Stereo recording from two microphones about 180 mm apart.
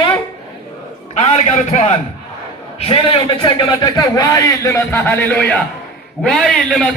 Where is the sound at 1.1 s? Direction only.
35° left (ahead or behind).